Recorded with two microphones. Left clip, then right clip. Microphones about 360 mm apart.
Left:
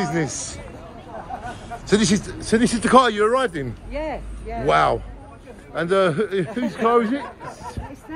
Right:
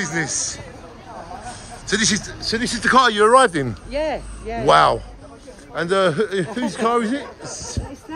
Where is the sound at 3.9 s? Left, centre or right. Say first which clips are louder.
Right 5 dB; right.